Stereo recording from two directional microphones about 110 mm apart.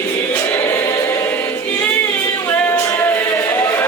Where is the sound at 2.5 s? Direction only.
20° left (ahead or behind).